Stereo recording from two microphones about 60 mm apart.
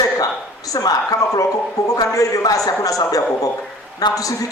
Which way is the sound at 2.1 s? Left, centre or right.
Left.